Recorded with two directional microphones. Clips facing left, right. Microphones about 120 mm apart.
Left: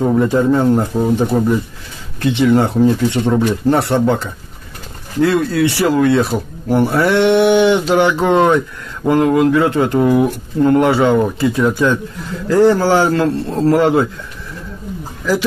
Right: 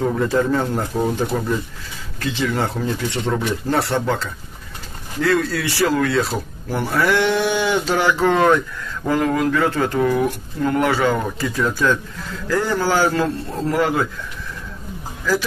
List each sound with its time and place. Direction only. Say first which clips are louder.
0.0 s speech: left 5 dB; 20° left (ahead or behind)